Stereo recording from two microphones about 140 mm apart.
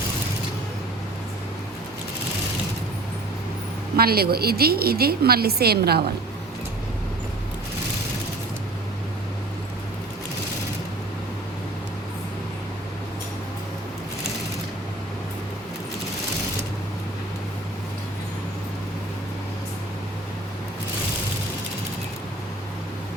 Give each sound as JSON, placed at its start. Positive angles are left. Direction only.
{"t": 3.9, "sound": "a woman's voice", "side_deg": -90}